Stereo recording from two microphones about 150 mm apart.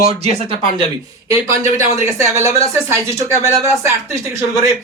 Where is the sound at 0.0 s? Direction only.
45° right (ahead or behind).